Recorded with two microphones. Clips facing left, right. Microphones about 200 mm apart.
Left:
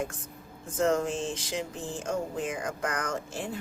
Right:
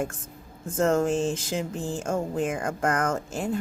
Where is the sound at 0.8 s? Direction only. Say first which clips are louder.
Right 4 dB; 50° right (ahead or behind).